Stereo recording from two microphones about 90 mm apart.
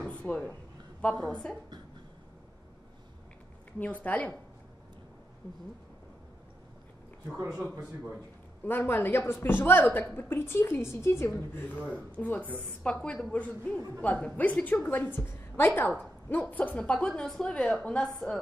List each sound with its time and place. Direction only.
0.0 s a sound: 15° left (ahead or behind)
1.2 s a woman's voice: 10° left (ahead or behind)
3.8 s a woman's voice: 15° left (ahead or behind)
8.6 s a woman's voice: 25° left (ahead or behind); by 18.4 s 5° left (ahead or behind)